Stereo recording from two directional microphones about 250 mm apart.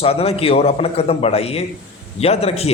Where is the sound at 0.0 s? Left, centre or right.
Left.